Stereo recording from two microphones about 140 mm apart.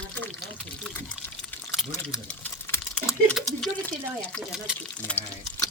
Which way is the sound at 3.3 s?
Centre (ahead or behind).